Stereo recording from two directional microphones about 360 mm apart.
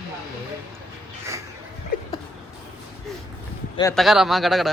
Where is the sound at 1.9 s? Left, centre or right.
Left.